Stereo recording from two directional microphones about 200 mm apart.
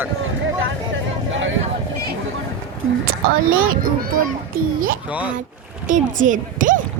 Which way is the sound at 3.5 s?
45° right (ahead or behind).